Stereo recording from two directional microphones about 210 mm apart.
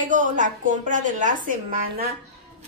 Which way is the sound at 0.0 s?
35° right (ahead or behind).